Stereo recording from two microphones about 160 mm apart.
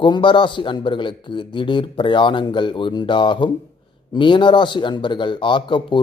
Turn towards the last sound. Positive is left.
turn(degrees=30)  # may be behind; listen again after turning